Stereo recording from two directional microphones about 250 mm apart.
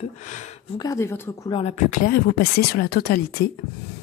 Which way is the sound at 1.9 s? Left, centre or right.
Left.